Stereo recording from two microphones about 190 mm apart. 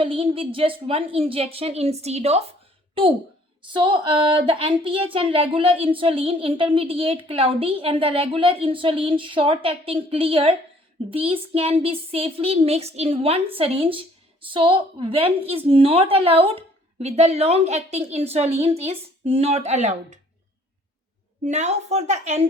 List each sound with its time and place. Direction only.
0.0 s a woman's voice: 30° right (ahead or behind)
3.6 s a woman's voice: 25° right (ahead or behind)
21.4 s a woman's voice: 40° right (ahead or behind)